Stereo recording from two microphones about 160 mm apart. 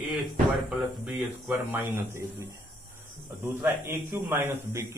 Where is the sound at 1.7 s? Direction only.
15° right (ahead or behind).